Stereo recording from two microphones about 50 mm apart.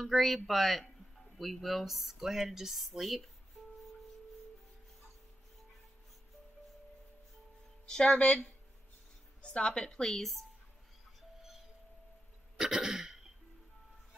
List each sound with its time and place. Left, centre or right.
0.0 s speech: centre
7.8 s speech: centre
9.4 s a woman's voice: centre
9.8 s a woman's voice: centre
11.1 s music: centre
12.5 s throat clearing: centre